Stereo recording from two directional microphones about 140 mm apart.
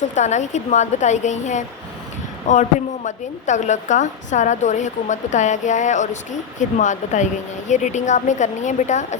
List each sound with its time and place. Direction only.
0.2 s a woman's voice: 60° left (ahead or behind)